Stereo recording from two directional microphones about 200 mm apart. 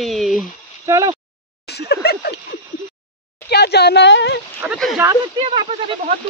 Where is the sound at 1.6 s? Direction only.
55° left (ahead or behind).